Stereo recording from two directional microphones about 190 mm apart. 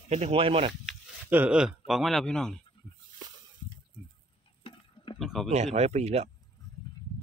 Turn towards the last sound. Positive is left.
turn(degrees=-35)  # may be behind; listen again after turning